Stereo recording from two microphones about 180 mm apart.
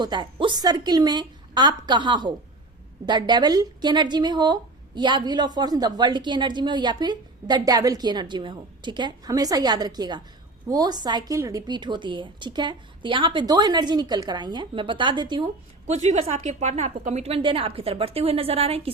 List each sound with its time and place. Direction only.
0.0 s a woman's voice: 25° right (ahead or behind)
15.9 s a woman's voice: 40° right (ahead or behind)